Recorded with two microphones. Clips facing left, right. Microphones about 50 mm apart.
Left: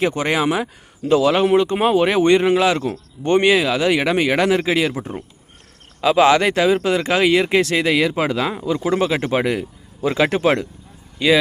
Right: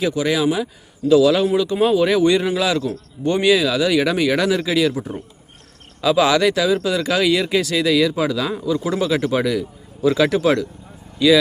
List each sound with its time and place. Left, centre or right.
0.0 s a man's voice: left
2.9 s a man's voice: left
3.5 s speech: left